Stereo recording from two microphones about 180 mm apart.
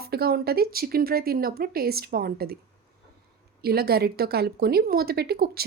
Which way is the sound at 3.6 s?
60° right (ahead or behind).